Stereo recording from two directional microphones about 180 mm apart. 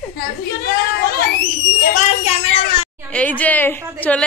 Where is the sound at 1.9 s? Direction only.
35° left (ahead or behind).